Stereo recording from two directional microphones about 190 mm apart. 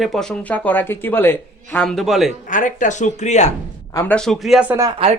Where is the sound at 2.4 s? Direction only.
40° left (ahead or behind).